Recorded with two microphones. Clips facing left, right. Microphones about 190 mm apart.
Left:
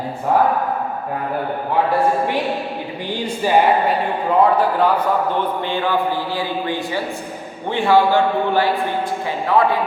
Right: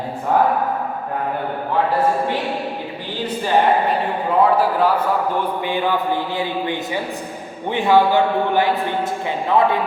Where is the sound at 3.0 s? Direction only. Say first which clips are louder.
Left 3 dB; 10° left (ahead or behind).